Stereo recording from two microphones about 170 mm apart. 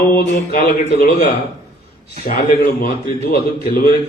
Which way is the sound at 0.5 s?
60° left (ahead or behind).